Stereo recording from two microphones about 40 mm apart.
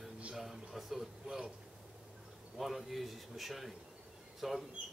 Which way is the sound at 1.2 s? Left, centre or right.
Centre.